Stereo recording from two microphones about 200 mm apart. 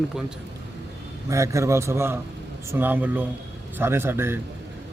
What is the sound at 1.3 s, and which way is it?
Speech, 15° right (ahead or behind).